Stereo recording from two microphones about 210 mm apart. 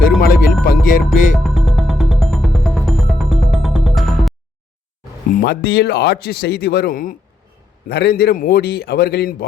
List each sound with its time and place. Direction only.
0.2 s speech: 45° left (ahead or behind)
1.4 s music: centre (ahead or behind)
5.3 s speech: 50° left (ahead or behind)